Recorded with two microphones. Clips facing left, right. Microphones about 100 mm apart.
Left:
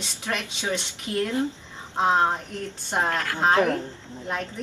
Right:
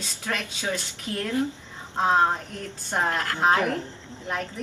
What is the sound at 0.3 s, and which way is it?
Speech, 15° left (ahead or behind).